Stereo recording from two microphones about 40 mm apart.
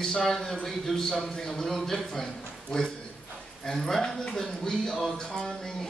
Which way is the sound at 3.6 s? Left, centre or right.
Centre.